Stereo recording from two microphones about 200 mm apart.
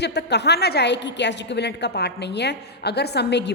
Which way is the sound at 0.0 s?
55° left (ahead or behind).